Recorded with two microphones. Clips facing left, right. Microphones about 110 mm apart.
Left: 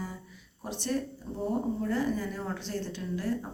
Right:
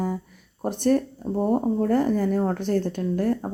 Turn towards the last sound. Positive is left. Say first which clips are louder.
# right 9 dB
turn(degrees=-50)  # may be behind; listen again after turning